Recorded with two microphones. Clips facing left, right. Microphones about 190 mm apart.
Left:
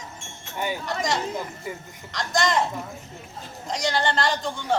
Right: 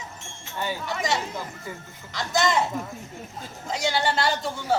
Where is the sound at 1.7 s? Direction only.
15° left (ahead or behind).